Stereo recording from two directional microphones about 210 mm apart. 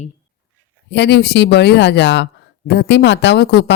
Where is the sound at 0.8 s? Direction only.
55° left (ahead or behind).